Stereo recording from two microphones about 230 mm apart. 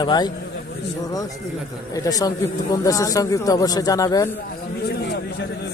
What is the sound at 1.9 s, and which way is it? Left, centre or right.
Speech, centre.